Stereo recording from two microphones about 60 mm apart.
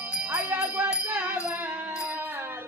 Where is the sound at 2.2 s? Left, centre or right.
Right.